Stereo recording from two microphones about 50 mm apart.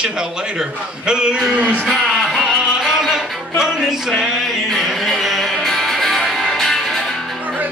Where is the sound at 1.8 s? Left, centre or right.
Centre.